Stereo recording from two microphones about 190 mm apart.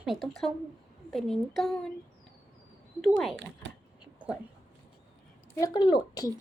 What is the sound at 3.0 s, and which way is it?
Speech, centre (ahead or behind).